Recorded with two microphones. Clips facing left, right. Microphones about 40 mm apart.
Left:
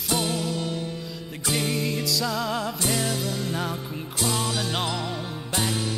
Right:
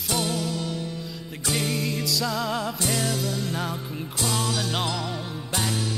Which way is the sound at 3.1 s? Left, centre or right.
Left.